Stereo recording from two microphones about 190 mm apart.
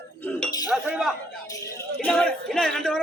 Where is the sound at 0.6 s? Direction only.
5° right (ahead or behind).